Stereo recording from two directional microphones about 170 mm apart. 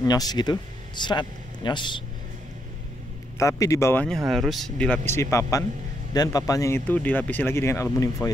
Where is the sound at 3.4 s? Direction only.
20° left (ahead or behind).